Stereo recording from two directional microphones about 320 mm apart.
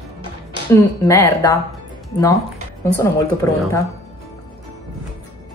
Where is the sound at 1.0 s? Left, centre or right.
Centre.